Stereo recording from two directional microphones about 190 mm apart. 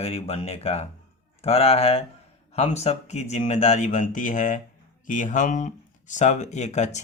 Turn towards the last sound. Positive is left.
turn(degrees=40)  # may be behind; listen again after turning